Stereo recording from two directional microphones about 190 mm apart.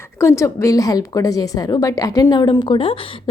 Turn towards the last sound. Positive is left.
turn(degrees=30)  # may be behind; listen again after turning